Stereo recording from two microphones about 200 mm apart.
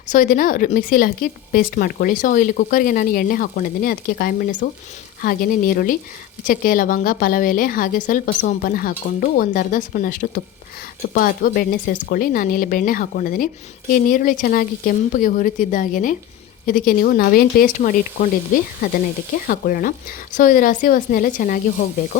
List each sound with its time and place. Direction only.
0.1 s speech: 45° left (ahead or behind)
19.5 s speech: 45° left (ahead or behind)